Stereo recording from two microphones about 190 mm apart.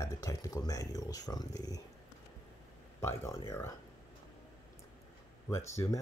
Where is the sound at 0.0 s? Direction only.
15° left (ahead or behind).